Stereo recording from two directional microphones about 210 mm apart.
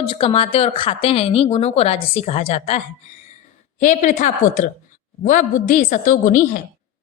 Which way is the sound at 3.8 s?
35° left (ahead or behind).